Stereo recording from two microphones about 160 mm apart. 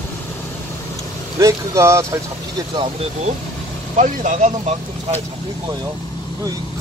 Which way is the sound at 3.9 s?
50° right (ahead or behind).